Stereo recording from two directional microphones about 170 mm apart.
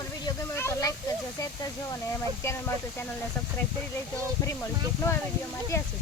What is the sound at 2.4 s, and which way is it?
Speech, 15° left (ahead or behind).